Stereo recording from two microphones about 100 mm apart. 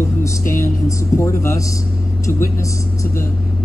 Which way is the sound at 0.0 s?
25° left (ahead or behind).